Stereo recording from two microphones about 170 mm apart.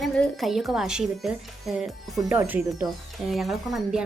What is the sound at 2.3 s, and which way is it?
Speech, 10° right (ahead or behind).